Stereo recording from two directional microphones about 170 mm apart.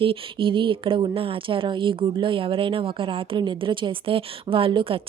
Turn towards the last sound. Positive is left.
turn(degrees=-30)  # may be behind; listen again after turning